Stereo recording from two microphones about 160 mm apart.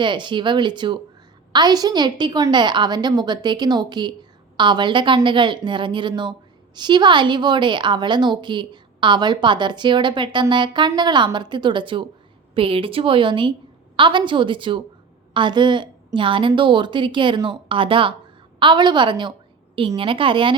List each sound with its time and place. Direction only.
0.0 s a woman's voice: 30° right (ahead or behind)